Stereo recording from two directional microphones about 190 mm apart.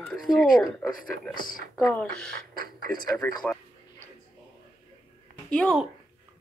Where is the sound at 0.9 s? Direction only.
45° left (ahead or behind).